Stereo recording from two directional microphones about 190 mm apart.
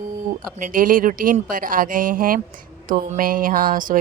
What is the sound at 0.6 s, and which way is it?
A woman's voice, 45° right (ahead or behind).